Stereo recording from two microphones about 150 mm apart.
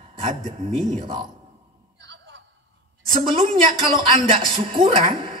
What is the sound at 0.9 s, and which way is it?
Speech, 35° right (ahead or behind).